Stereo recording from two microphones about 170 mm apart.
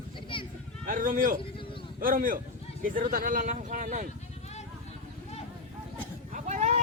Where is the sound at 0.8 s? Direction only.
55° right (ahead or behind).